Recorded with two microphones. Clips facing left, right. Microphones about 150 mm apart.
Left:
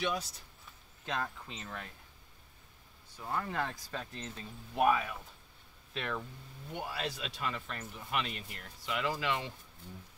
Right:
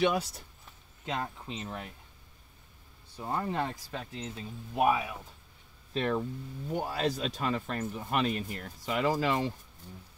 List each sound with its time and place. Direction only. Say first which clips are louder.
1.0 s speech: right 2 dB; 20° right (ahead or behind)
3.2 s speech: right 4 dB; 25° right (ahead or behind); by 5.2 s 10° right (ahead or behind)
5.9 s speech: right 8 dB; 35° right (ahead or behind)